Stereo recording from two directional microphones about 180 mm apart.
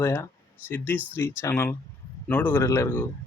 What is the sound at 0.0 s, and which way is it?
Speech, 15° left (ahead or behind).